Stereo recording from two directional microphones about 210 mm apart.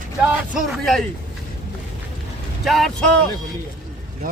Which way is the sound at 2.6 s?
Centre (ahead or behind).